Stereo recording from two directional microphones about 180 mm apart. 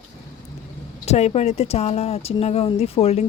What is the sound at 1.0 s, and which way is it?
Speech, 35° left (ahead or behind).